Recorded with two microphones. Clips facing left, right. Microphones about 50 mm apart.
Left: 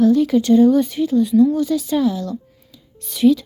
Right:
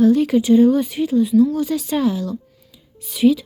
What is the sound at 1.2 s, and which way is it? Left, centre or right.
Speech, centre.